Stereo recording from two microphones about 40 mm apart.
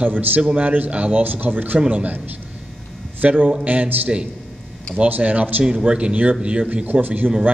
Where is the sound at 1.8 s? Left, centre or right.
Right.